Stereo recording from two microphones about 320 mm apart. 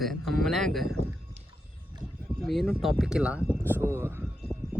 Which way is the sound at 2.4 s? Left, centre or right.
Centre.